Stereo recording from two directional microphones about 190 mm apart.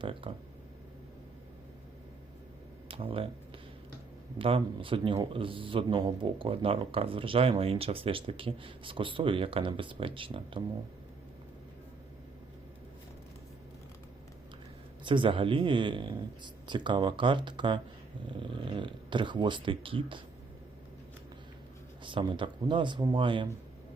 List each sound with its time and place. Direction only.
0.0 s a man's voice: 25° right (ahead or behind)
2.9 s speech: 30° right (ahead or behind)
4.4 s a man's voice: 30° right (ahead or behind)
15.0 s a man's voice: 25° right (ahead or behind)
22.0 s a man's voice: 25° right (ahead or behind)